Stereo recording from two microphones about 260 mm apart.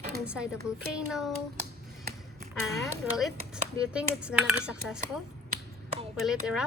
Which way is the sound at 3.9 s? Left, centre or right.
Centre.